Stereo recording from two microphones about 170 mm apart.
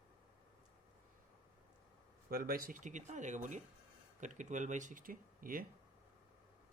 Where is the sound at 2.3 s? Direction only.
60° right (ahead or behind).